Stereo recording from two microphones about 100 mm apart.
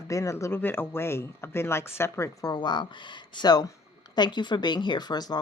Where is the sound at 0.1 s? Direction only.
30° left (ahead or behind).